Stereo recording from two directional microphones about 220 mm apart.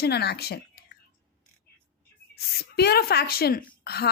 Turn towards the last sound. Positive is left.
turn(degrees=45)  # may be behind; listen again after turning